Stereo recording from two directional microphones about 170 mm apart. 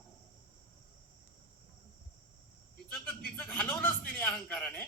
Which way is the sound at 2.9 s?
10° left (ahead or behind).